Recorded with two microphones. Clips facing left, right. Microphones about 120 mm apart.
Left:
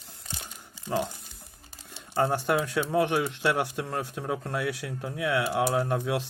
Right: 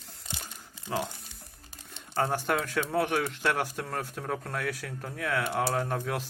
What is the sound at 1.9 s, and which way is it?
Speech, 10° left (ahead or behind).